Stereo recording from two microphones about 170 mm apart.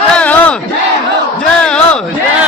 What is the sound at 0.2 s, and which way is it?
Battle cry, 10° left (ahead or behind).